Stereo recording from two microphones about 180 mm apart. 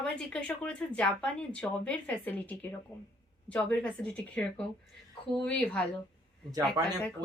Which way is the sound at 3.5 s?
5° left (ahead or behind).